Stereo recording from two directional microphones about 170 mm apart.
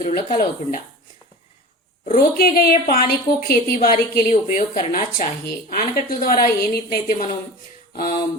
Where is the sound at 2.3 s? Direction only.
60° left (ahead or behind).